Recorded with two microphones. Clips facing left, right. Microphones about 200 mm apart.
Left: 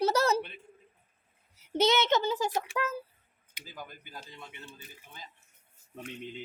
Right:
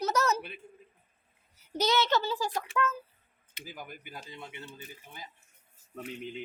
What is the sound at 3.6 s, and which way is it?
Speech, 15° right (ahead or behind).